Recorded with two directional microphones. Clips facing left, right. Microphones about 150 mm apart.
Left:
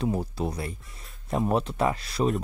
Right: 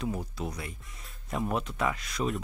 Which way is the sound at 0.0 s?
30° left (ahead or behind).